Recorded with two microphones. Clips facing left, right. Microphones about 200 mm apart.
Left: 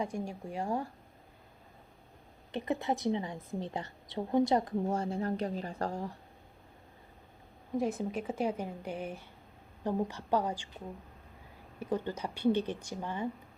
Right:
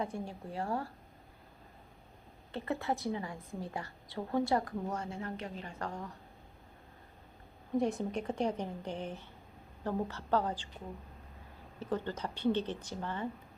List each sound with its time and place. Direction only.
0.0 s speech: 15° left (ahead or behind)
2.5 s a woman's voice: 15° left (ahead or behind)
7.8 s speech: centre (ahead or behind)
11.8 s speech: 10° left (ahead or behind)